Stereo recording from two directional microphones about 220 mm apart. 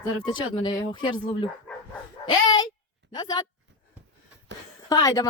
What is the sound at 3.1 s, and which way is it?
Speech, 20° left (ahead or behind).